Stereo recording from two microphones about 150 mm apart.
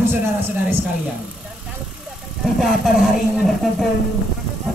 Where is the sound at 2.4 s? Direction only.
Centre (ahead or behind).